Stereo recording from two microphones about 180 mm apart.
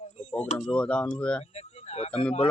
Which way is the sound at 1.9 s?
35° left (ahead or behind).